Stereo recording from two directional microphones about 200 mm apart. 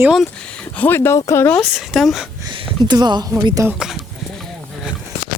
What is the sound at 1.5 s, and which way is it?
Speech, centre (ahead or behind).